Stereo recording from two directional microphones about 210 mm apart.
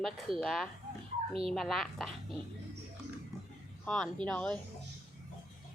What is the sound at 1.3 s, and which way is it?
Speech, 25° right (ahead or behind).